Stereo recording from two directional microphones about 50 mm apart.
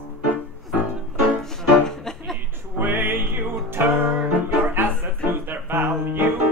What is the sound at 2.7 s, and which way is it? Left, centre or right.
Music, right.